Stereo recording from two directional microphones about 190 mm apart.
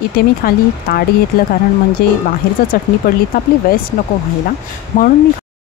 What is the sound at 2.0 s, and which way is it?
Speech, 55° left (ahead or behind).